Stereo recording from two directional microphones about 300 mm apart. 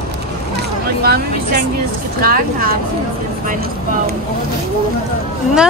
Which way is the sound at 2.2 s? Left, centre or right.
Right.